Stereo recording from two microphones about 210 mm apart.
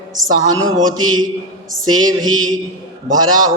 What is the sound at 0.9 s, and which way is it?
Speech, 80° right.